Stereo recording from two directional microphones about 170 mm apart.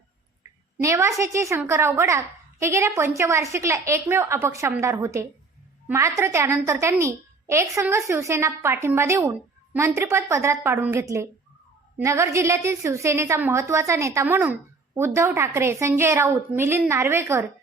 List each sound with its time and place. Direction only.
0.8 s a woman's voice: 15° right (ahead or behind)